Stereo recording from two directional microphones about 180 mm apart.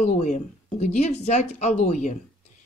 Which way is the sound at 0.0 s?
40° left (ahead or behind).